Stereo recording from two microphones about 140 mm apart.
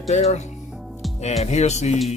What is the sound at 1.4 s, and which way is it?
Speech, 50° left (ahead or behind).